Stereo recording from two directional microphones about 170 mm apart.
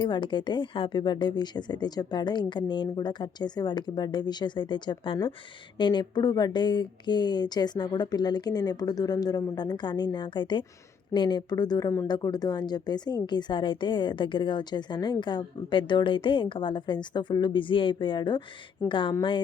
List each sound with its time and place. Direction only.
0.0 s speech: 25° left (ahead or behind)